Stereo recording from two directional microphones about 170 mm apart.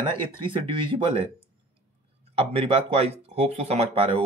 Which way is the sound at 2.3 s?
30° right (ahead or behind).